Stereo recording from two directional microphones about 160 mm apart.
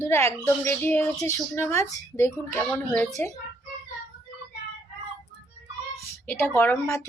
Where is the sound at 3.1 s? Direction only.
20° left (ahead or behind).